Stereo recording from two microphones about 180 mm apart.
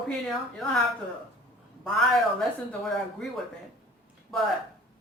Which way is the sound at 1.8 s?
Centre (ahead or behind).